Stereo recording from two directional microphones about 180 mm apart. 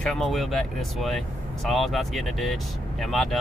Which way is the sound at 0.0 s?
Centre (ahead or behind).